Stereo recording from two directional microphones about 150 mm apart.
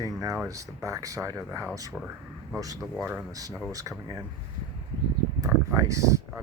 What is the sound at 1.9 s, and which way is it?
Speech, 5° right (ahead or behind).